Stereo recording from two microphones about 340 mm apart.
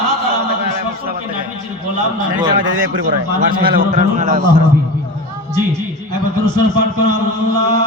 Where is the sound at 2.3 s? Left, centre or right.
Right.